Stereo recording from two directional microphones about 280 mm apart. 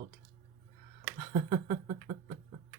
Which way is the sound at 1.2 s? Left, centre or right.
Right.